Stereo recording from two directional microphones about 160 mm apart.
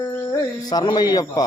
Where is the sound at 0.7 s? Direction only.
25° left (ahead or behind).